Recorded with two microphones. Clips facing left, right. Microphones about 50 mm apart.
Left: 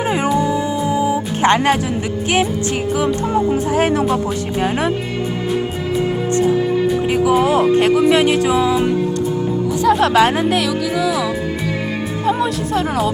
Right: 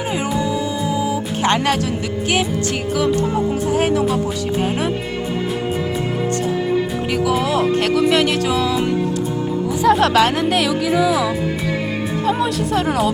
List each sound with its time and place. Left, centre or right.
0.0 s music: left
3.7 s speech: left
7.1 s speech: left
9.8 s music: centre
10.1 s speech: centre
10.5 s music: centre
12.2 s speech: centre